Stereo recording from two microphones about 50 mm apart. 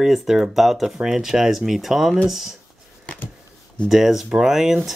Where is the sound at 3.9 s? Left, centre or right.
Centre.